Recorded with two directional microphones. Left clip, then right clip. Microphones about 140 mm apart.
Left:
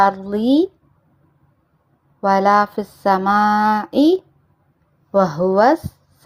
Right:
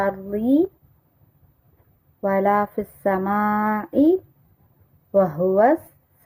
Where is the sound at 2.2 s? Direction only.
5° left (ahead or behind).